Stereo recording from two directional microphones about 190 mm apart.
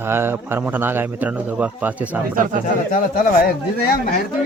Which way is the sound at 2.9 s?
45° left (ahead or behind).